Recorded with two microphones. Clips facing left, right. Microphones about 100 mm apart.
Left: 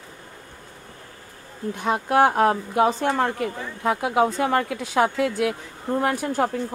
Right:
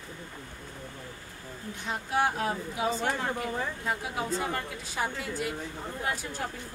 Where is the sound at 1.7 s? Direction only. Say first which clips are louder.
Left 10 dB; 65° left (ahead or behind).